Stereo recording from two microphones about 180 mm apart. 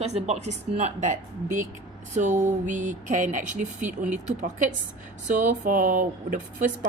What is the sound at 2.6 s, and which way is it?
Speech, 45° right (ahead or behind).